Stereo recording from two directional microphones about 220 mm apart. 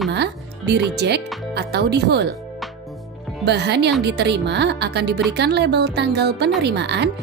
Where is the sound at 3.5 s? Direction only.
50° right (ahead or behind).